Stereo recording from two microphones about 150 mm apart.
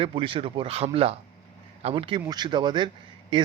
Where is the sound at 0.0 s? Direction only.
35° right (ahead or behind).